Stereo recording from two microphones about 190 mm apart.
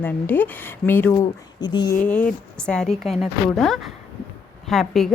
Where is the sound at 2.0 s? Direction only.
10° left (ahead or behind).